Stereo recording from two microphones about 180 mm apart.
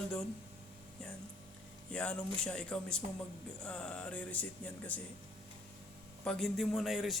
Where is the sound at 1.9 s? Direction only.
5° left (ahead or behind).